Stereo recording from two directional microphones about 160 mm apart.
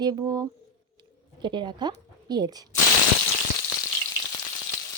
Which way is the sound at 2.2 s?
25° right (ahead or behind).